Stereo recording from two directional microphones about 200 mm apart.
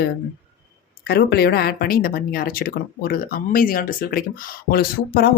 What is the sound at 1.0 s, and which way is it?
A woman's voice, 55° left (ahead or behind).